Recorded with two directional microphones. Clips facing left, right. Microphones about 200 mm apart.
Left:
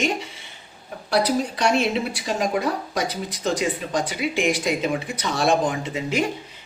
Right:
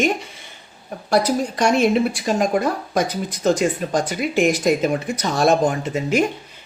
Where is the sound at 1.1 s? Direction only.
45° right (ahead or behind).